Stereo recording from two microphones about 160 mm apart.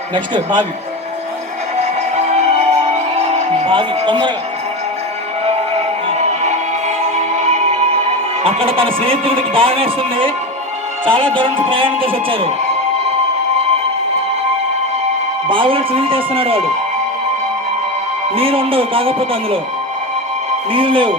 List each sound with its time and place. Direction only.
0.1 s a man's voice: 30° right (ahead or behind)
1.8 s music: 40° right (ahead or behind)
5.5 s music: 40° right (ahead or behind)
8.4 s speech: 35° right (ahead or behind)
15.4 s speech: 30° right (ahead or behind)
18.3 s speech: 35° right (ahead or behind)
20.7 s speech: 30° right (ahead or behind)